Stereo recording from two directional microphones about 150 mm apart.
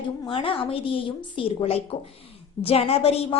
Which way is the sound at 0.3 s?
35° left (ahead or behind).